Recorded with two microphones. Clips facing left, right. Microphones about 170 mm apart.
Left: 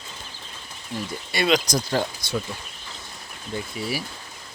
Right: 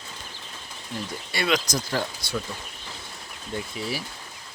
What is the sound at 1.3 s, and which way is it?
Speech, 15° left (ahead or behind).